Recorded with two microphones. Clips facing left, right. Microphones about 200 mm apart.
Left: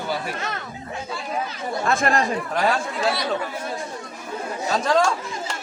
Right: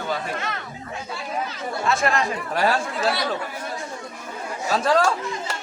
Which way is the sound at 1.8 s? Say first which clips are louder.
Left 1 dB; 50° left (ahead or behind).